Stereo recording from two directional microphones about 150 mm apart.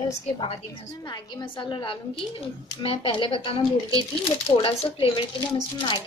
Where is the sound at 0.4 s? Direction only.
40° left (ahead or behind).